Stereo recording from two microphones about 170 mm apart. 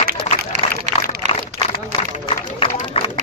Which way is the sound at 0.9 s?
40° right (ahead or behind).